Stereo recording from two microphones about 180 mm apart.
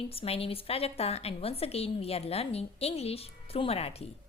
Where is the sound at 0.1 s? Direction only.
30° left (ahead or behind).